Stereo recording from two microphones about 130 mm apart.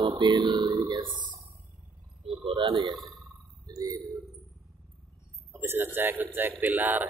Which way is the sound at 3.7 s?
30° right (ahead or behind).